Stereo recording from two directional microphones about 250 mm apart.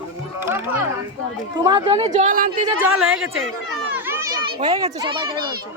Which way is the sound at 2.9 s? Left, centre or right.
Right.